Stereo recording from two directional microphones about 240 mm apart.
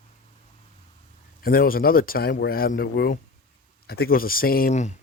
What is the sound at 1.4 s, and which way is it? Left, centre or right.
Speech, left.